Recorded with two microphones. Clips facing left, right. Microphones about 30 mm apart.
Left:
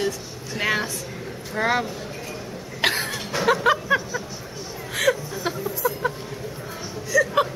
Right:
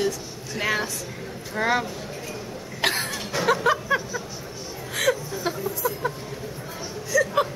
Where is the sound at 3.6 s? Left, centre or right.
Centre.